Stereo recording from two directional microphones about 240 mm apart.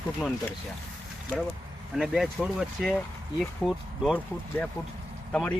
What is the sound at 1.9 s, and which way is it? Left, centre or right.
Speech, centre.